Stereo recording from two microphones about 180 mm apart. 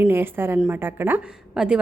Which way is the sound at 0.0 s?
10° right (ahead or behind).